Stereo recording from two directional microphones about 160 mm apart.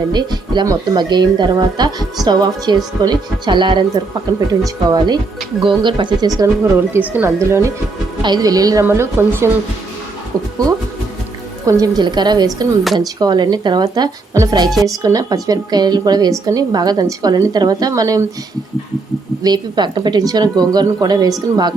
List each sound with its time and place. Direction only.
0.1 s speech: 25° right (ahead or behind)
11.6 s speech: 20° right (ahead or behind)
19.4 s speech: 25° right (ahead or behind)